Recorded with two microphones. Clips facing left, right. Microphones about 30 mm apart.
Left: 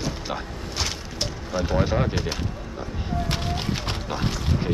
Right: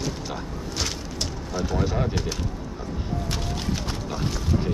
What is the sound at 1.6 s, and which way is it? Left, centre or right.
Speech, left.